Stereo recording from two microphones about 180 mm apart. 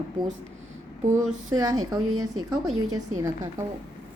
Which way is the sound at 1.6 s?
20° right (ahead or behind).